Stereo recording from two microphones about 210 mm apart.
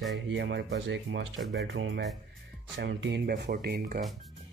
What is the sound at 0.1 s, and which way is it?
Speech, 60° right (ahead or behind).